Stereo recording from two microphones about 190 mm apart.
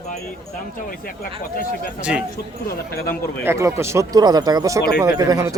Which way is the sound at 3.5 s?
15° right (ahead or behind).